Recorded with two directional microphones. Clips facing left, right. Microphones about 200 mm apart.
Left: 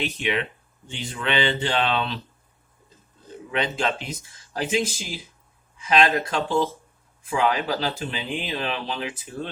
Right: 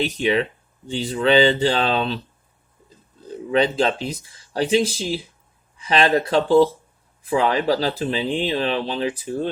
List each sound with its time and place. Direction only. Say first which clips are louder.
0.0 s speech: right 6 dB; 35° right (ahead or behind)
3.5 s speech: right 7 dB; 35° right (ahead or behind)